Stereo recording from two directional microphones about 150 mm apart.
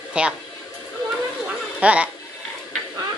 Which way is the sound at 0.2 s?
10° right (ahead or behind).